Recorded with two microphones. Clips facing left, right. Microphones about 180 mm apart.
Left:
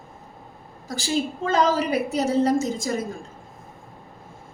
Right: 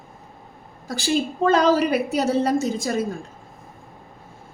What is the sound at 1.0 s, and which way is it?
A woman's voice, 65° right (ahead or behind).